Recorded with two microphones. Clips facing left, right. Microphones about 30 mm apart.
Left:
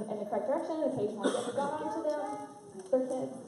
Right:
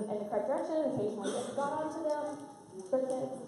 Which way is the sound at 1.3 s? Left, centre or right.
Left.